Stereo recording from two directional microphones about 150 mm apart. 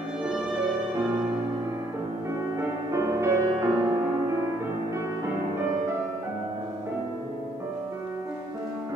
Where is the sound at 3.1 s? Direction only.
20° right (ahead or behind).